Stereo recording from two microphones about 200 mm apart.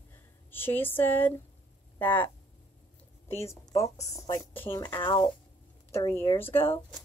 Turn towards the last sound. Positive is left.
turn(degrees=10)  # may be behind; listen again after turning